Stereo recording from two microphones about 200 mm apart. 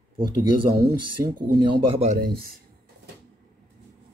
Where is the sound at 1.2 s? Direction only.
20° right (ahead or behind).